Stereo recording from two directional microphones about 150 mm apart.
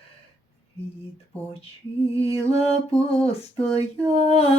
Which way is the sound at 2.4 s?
45° left (ahead or behind).